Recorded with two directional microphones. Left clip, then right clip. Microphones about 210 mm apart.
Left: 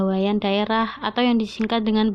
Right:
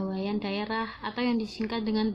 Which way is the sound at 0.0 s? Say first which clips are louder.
Left 10 dB; 45° left (ahead or behind).